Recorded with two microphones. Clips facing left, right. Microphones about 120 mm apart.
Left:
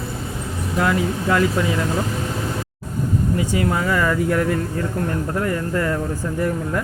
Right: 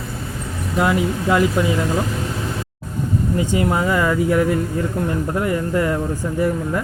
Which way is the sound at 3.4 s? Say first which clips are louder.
Right 5 dB; 25° right (ahead or behind).